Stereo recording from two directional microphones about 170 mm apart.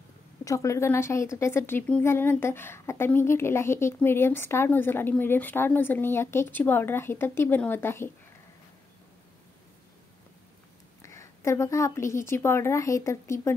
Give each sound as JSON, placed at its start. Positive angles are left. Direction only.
{"t": 0.5, "sound": "a woman's voice", "side_deg": 20}
{"t": 11.0, "sound": "a woman's voice", "side_deg": 15}